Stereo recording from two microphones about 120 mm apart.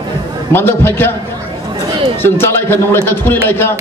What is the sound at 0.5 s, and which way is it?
Speech, 20° left (ahead or behind).